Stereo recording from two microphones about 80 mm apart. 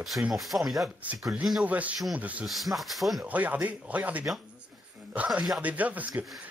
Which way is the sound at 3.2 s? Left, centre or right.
Centre.